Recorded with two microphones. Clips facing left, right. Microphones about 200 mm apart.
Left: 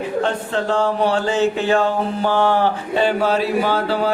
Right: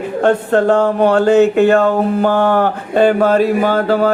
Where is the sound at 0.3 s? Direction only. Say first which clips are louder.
Right 9 dB; 55° right (ahead or behind).